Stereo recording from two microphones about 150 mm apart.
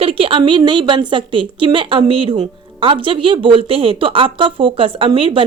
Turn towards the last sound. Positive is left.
turn(degrees=-35)  # may be behind; listen again after turning